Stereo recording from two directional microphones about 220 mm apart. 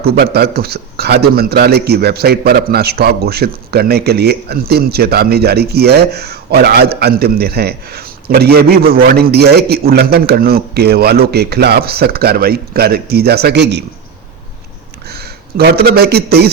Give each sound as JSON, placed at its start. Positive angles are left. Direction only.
{"t": 0.0, "sound": "a man's voice", "side_deg": -45}
{"t": 15.0, "sound": "speech", "side_deg": -45}